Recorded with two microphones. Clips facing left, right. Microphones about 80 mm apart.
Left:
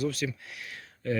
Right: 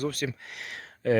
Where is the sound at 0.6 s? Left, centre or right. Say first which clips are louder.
Right 3 dB; right.